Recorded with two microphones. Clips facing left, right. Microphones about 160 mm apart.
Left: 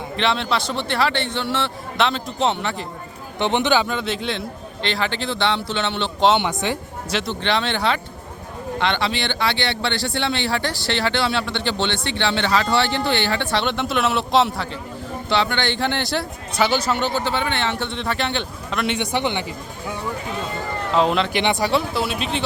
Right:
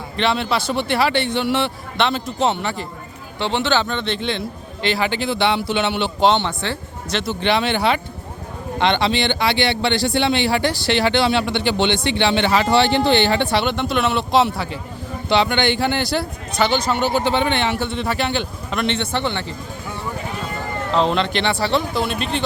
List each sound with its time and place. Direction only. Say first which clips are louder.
0.2 s speech: right 2 dB; 5° right (ahead or behind)
2.0 s a man's voice: right 1 dB; centre (ahead or behind)
3.3 s a man's voice: left 1 dB; 20° left (ahead or behind); by 6.3 s 5° right (ahead or behind)
6.3 s speech: left 1 dB; 15° left (ahead or behind)
7.2 s speech: right 3 dB; 5° right (ahead or behind)
13.7 s a man's voice: right 1 dB; centre (ahead or behind)
15.3 s speech: right 4 dB; 15° right (ahead or behind)
15.8 s a man's voice: right 2 dB; 5° right (ahead or behind)
17.2 s speech: right 4 dB; 20° right (ahead or behind)
17.7 s a man's voice: right 3 dB; 5° right (ahead or behind)
18.9 s speech: even; 15° left (ahead or behind)
20.9 s a man's voice: even; 5° left (ahead or behind)
21.4 s speech: even; 15° left (ahead or behind)
21.7 s a man's voice: right 1 dB; 5° left (ahead or behind)